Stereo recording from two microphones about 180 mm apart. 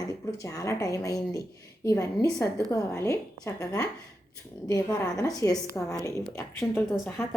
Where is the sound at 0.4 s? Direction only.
15° left (ahead or behind).